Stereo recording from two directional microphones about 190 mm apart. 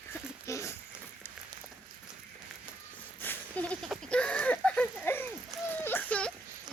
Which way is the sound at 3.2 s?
10° left (ahead or behind).